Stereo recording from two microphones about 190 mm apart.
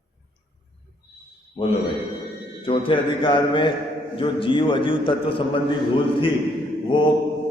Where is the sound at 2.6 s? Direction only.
25° left (ahead or behind).